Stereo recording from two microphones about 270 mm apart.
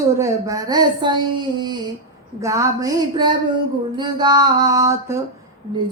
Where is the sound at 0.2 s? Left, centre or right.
Centre.